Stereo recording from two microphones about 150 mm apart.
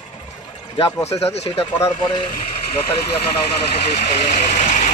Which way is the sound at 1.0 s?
45° left (ahead or behind).